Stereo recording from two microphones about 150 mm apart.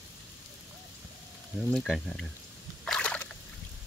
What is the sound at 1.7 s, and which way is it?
Speech, centre (ahead or behind).